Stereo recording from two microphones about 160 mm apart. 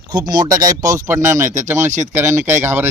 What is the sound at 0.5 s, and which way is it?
Speech, 20° right (ahead or behind).